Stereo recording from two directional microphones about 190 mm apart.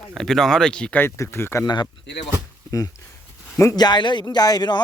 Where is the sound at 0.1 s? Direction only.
Centre (ahead or behind).